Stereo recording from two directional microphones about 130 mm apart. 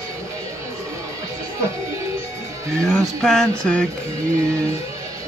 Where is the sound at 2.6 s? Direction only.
25° right (ahead or behind).